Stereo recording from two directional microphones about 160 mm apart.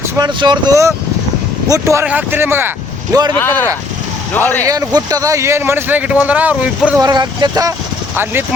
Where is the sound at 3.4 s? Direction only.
15° left (ahead or behind).